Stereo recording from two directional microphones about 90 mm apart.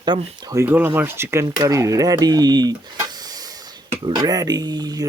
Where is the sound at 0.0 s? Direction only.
60° right (ahead or behind).